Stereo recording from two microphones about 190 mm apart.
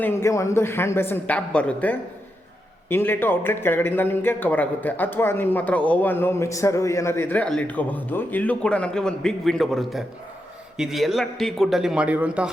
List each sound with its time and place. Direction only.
0.0 s a man's voice: 15° left (ahead or behind); by 12.5 s 5° right (ahead or behind)